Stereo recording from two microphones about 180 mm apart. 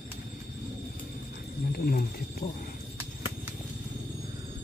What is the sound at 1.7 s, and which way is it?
Speech, 55° left (ahead or behind).